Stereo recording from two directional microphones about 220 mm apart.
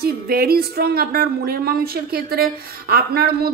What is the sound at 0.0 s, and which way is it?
Speech, 45° right (ahead or behind).